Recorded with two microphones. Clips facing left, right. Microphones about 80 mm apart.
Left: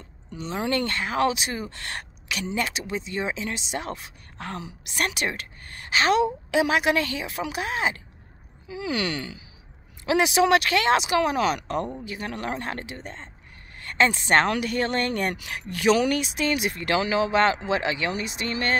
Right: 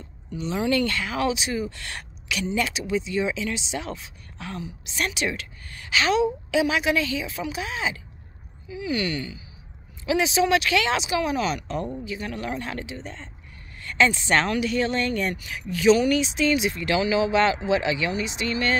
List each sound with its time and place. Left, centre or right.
0.3 s a woman's voice: left
8.6 s speech: left
10.0 s a woman's voice: left